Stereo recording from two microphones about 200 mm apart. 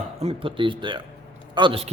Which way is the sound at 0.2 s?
30° right (ahead or behind).